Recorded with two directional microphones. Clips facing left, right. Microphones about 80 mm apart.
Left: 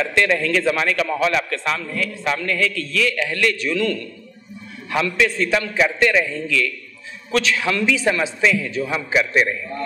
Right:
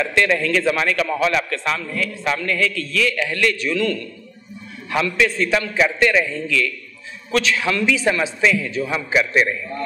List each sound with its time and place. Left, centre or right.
0.0 s a man's voice: right